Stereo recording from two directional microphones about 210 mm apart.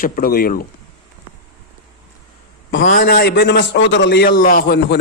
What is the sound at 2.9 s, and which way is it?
A man's voice, 45° left (ahead or behind).